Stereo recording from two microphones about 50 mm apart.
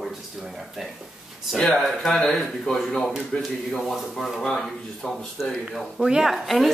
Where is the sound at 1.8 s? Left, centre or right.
Centre.